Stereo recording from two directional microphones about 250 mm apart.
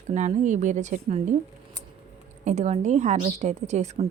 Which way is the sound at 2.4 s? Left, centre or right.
Right.